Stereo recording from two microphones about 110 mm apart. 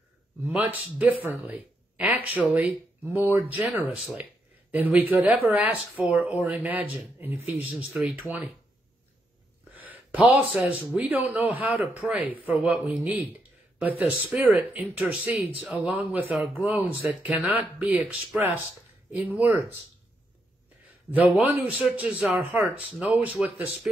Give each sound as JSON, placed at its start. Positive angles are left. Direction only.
{"t": 0.5, "sound": "speech", "side_deg": -15}
{"t": 7.7, "sound": "speech", "side_deg": -5}
{"t": 9.7, "sound": "speech", "side_deg": -15}
{"t": 19.1, "sound": "speech", "side_deg": -15}
{"t": 21.1, "sound": "speech", "side_deg": -15}